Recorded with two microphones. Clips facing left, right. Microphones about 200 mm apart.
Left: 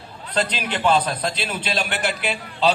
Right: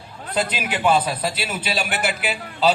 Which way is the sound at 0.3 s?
5° right (ahead or behind).